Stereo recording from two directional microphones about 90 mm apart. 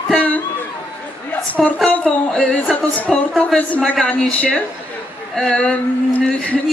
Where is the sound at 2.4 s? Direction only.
15° left (ahead or behind).